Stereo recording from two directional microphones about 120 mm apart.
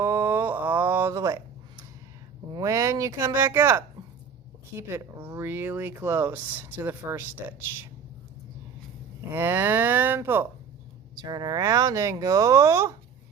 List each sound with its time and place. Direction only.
0.0 s a sound: 20° right (ahead or behind)
2.5 s speech: 30° right (ahead or behind)
9.3 s speech: 20° right (ahead or behind)
11.1 s speech: 35° right (ahead or behind)